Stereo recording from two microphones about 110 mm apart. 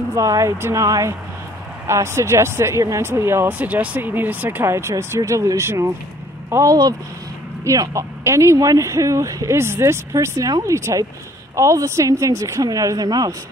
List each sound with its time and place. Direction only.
0.1 s speech: 30° right (ahead or behind)